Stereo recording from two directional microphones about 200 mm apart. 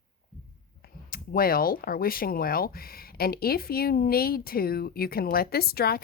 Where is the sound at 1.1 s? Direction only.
45° left (ahead or behind).